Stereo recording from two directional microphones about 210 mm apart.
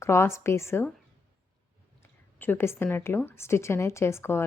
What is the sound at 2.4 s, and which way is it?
Speech, 10° left (ahead or behind).